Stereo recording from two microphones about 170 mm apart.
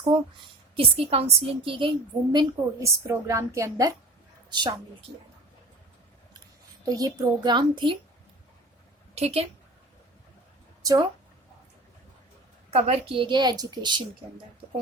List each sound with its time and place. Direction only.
0.1 s a woman's voice: 30° right (ahead or behind)
2.3 s a woman's voice: 20° right (ahead or behind)
6.8 s a woman's voice: 20° right (ahead or behind)
9.1 s a woman's voice: 35° right (ahead or behind)
10.8 s a woman's voice: 20° right (ahead or behind)
12.7 s a woman's voice: 35° right (ahead or behind)